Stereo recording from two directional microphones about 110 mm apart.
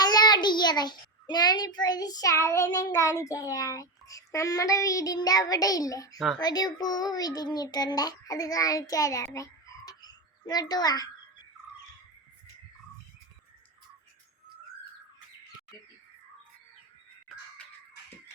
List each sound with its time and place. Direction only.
0.0 s a child's voice: 40° left (ahead or behind)
6.1 s speech: centre (ahead or behind)
6.4 s a child's voice: 35° left (ahead or behind)